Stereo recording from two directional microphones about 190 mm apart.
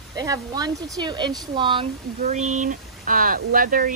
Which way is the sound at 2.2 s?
40° right (ahead or behind).